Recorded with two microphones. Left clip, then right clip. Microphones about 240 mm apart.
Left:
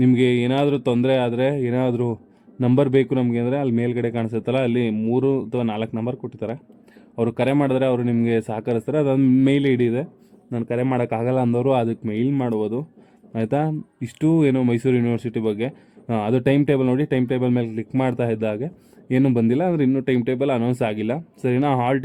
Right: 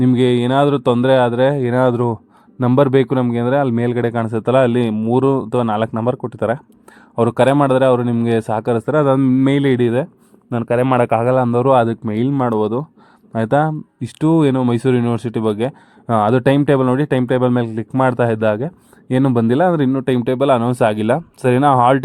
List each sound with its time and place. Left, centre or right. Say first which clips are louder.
0.0 s speech: right 3 dB; centre
9.2 s speech: right 2 dB; centre
9.7 s speech: right 5 dB; centre